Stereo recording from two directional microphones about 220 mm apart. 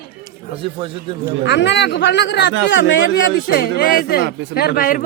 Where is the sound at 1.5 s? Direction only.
50° left (ahead or behind).